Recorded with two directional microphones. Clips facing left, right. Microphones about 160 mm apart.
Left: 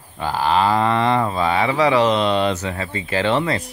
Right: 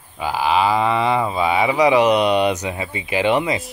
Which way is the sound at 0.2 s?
5° right (ahead or behind).